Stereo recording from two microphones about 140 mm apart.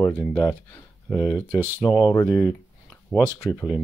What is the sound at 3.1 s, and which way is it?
Speech, 5° right (ahead or behind).